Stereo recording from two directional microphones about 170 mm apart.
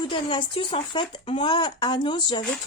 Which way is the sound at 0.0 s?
30° left (ahead or behind).